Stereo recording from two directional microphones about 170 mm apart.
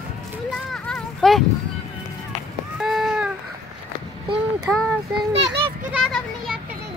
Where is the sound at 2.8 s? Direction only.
Centre (ahead or behind).